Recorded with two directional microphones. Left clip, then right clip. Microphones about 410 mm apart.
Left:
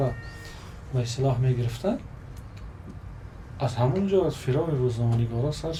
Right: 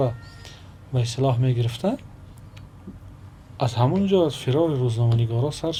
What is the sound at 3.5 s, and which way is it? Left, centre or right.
Speech, right.